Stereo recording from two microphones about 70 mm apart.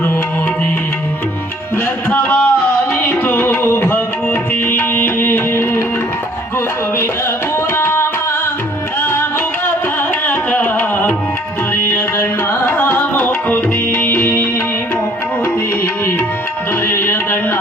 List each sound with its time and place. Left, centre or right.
2.0 s a sound: left
2.9 s music: left
7.8 s tabla: left
9.0 s music: left
10.2 s music: left
16.8 s music: left